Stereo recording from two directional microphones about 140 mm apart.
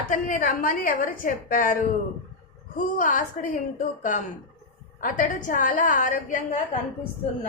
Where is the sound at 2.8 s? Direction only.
70° left (ahead or behind).